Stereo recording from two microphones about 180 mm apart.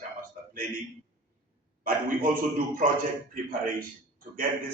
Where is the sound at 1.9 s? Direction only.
50° right (ahead or behind).